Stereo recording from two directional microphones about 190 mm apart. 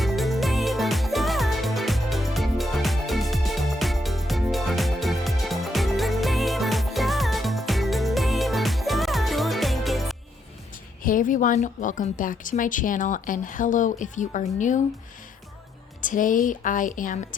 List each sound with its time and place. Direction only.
0.0 s music: centre (ahead or behind)
11.0 s speech: 45° left (ahead or behind)
16.0 s speech: 45° left (ahead or behind)